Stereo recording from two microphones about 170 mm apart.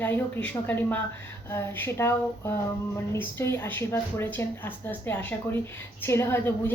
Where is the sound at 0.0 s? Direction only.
10° left (ahead or behind).